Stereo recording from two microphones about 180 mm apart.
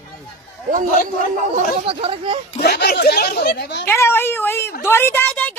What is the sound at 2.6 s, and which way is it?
Speech, 65° left (ahead or behind).